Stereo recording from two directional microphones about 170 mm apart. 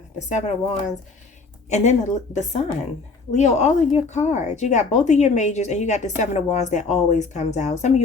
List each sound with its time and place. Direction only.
0.3 s speech: 45° left (ahead or behind)
1.7 s speech: 45° left (ahead or behind)